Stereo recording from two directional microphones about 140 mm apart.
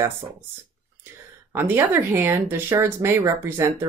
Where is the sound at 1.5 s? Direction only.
15° right (ahead or behind).